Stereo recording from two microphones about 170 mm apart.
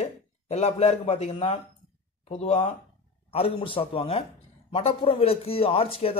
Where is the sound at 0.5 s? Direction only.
40° left (ahead or behind).